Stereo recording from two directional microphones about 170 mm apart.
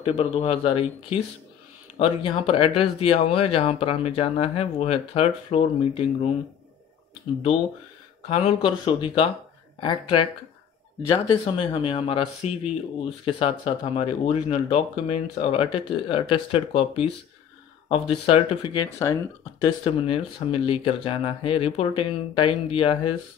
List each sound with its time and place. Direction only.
0.0 s speech: 35° left (ahead or behind)
8.3 s speech: 30° left (ahead or behind)